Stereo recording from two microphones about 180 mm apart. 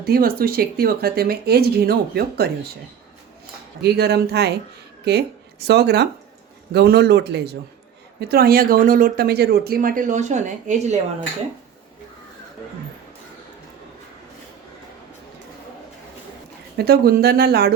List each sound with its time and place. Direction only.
0.0 s speech: 55° right (ahead or behind)
3.8 s speech: 65° right (ahead or behind)
8.2 s speech: 55° right (ahead or behind); by 10.9 s 40° right (ahead or behind)
16.7 s speech: 60° right (ahead or behind)